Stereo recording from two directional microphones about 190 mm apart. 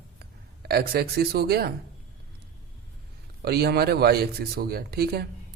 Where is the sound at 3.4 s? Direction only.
55° right (ahead or behind).